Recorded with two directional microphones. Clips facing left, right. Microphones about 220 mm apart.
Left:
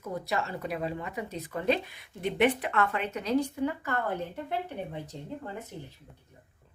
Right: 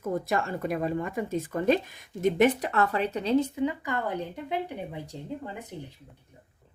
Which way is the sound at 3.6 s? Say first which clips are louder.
Right 2 dB; 15° right (ahead or behind).